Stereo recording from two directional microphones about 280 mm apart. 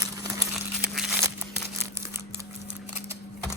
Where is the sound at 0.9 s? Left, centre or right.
Centre.